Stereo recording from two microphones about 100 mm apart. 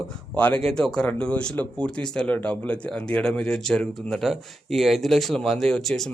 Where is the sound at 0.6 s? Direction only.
5° left (ahead or behind).